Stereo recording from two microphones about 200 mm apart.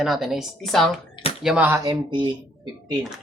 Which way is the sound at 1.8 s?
20° right (ahead or behind).